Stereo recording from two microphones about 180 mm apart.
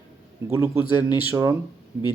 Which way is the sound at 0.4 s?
15° right (ahead or behind).